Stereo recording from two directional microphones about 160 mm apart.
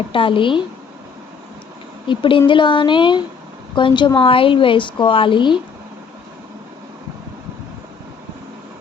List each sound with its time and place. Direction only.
0.1 s speech: 30° left (ahead or behind)
2.0 s speech: 30° left (ahead or behind)